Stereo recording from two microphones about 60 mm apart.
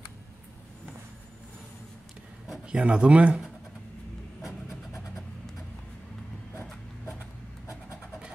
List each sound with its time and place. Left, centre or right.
2.6 s speech: centre